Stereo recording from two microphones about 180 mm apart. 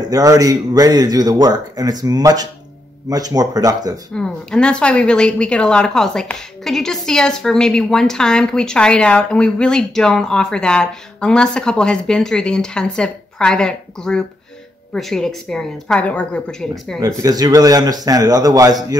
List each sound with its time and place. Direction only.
0.0 s speech: 20° right (ahead or behind)
4.1 s speech: 5° left (ahead or behind)
17.2 s speech: 20° right (ahead or behind)